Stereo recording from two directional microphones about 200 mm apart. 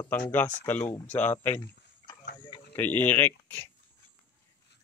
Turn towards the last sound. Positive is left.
turn(degrees=10)  # may be behind; listen again after turning